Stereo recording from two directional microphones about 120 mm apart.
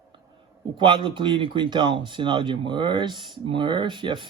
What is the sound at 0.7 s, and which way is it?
Speech, 40° right (ahead or behind).